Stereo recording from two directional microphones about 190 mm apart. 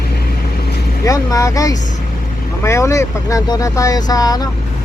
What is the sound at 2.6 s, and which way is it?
Speech, 15° left (ahead or behind).